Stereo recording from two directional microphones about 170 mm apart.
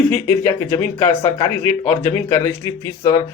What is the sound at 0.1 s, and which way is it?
Speech, 15° left (ahead or behind).